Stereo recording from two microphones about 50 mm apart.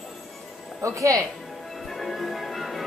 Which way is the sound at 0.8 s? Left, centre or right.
Right.